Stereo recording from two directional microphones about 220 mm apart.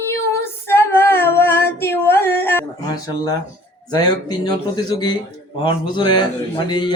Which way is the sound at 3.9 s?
20° left (ahead or behind).